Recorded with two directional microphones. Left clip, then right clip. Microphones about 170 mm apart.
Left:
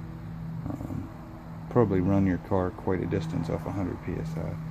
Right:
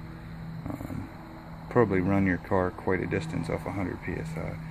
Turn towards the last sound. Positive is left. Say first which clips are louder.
# even
turn(degrees=5)  # may be behind; listen again after turning